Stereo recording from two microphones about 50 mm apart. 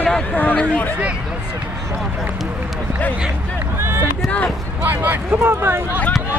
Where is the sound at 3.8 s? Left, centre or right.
Right.